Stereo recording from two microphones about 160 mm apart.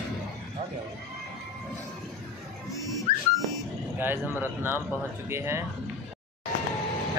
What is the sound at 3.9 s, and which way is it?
Speech, 15° right (ahead or behind).